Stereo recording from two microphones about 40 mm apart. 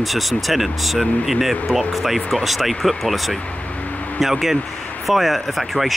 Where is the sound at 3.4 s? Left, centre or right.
Left.